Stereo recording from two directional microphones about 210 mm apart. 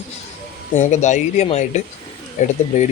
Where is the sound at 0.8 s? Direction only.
35° left (ahead or behind).